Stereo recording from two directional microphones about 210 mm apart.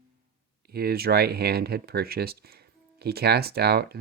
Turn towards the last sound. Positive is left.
turn(degrees=-50)  # may be behind; listen again after turning